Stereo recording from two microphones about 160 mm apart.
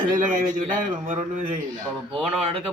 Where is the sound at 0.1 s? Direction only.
55° right (ahead or behind).